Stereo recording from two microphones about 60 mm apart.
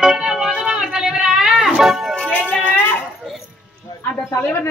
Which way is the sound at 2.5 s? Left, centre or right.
Left.